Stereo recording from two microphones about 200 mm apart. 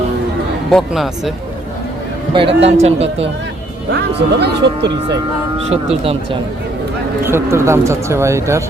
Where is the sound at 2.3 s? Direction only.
30° right (ahead or behind).